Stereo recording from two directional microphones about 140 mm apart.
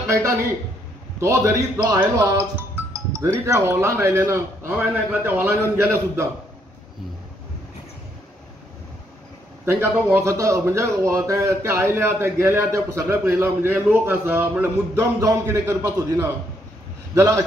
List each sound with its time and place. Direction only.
0.0 s speech: 20° right (ahead or behind)
9.7 s a man's voice: 15° right (ahead or behind)
17.1 s speech: 20° right (ahead or behind)